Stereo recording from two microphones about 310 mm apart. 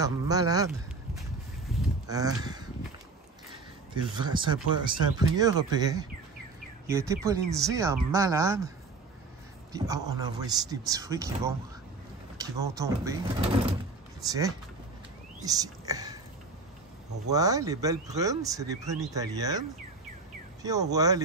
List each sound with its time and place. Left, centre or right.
0.0 s speech: centre
1.7 s a sound: centre
2.0 s speech: centre
3.9 s speech: centre
17.3 s speech: centre
20.6 s speech: centre